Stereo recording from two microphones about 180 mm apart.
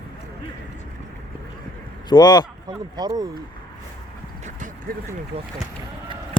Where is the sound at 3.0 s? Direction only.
20° right (ahead or behind).